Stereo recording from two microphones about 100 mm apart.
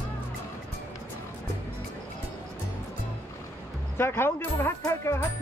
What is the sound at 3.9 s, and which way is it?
Speech, 25° left (ahead or behind).